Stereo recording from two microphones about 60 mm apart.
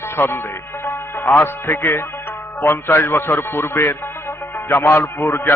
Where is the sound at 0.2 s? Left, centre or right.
Left.